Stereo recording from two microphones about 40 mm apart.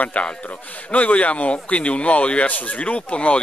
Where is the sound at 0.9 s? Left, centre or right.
Left.